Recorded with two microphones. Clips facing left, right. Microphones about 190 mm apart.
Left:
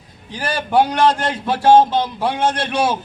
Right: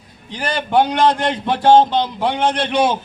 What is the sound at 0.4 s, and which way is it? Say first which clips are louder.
A man's voice: even; 10° left (ahead or behind).